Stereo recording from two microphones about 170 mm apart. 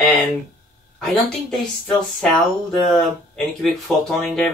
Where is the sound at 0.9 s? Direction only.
Centre (ahead or behind).